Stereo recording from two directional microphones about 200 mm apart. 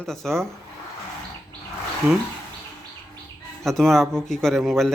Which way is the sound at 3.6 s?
Centre (ahead or behind).